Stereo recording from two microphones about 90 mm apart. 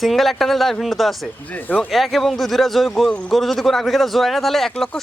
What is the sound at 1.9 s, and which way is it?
Speech, centre (ahead or behind).